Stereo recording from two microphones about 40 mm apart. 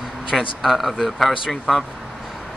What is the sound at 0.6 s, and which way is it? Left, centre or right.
Speech, centre.